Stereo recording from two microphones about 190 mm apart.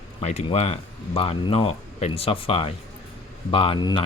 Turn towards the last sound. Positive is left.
turn(degrees=25)  # may be behind; listen again after turning